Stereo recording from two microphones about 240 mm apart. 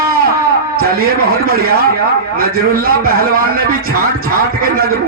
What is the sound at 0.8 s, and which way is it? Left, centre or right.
A man's voice, right.